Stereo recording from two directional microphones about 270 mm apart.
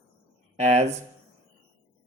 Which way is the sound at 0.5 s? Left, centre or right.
Right.